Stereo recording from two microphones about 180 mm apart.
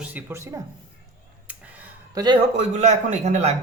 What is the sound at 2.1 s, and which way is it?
Speech, 25° right (ahead or behind).